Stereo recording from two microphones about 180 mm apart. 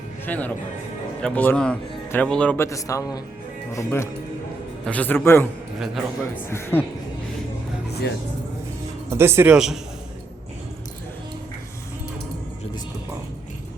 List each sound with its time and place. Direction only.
0.3 s speech: 10° left (ahead or behind)
5.8 s a man's voice: centre (ahead or behind)
6.5 s speech: 10° left (ahead or behind)
9.0 s speech: 15° right (ahead or behind)